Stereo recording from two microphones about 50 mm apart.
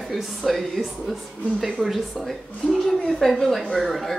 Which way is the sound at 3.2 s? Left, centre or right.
Centre.